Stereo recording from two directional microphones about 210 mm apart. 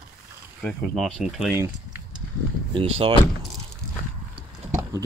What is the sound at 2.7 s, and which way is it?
Speech, 25° right (ahead or behind).